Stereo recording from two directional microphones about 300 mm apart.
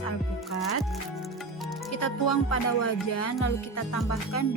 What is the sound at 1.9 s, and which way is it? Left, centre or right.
Music, left.